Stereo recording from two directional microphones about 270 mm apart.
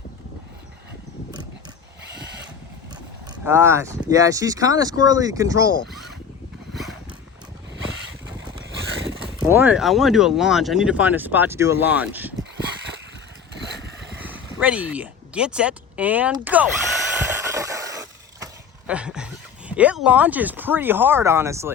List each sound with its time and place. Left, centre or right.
3.4 s speech: centre
5.8 s zipper: centre
9.4 s speech: centre
13.5 s vehicle: right
14.3 s a sound: centre
18.9 s speech: centre